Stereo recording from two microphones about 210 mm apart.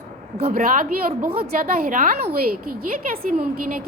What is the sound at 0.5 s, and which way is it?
A woman's voice, 40° right (ahead or behind).